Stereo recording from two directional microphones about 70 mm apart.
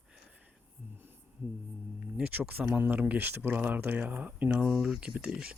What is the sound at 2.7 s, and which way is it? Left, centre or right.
Speech, right.